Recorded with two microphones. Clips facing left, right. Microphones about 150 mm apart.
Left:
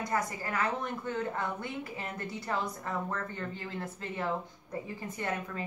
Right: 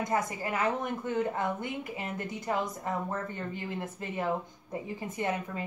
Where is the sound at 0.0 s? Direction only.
20° right (ahead or behind).